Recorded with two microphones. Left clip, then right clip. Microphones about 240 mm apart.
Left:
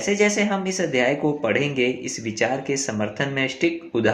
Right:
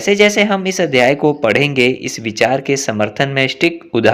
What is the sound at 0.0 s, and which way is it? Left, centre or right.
Speech, right.